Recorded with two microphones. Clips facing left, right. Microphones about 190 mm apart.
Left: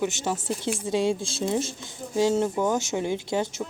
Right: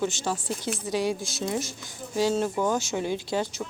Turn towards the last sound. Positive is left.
turn(degrees=20)  # may be behind; listen again after turning